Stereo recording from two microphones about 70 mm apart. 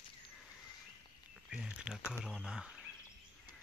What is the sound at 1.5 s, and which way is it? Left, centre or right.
Speech, centre.